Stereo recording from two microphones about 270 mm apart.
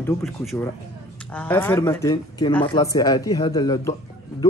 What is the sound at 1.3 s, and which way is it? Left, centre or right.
Speech, centre.